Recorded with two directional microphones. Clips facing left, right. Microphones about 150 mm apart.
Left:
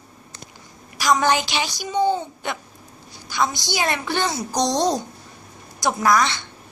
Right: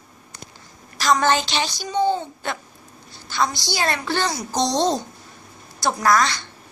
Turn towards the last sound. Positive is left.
turn(degrees=20)  # may be behind; listen again after turning